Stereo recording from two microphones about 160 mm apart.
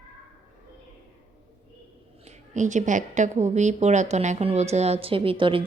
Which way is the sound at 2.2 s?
50° right (ahead or behind).